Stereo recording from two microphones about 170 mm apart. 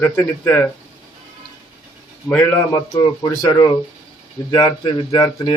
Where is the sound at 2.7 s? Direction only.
25° left (ahead or behind).